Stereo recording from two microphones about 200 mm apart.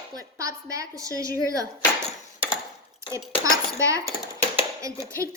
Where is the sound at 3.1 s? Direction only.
15° right (ahead or behind).